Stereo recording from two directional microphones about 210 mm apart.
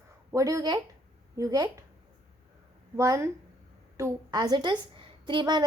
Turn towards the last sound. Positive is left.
turn(degrees=-20)  # may be behind; listen again after turning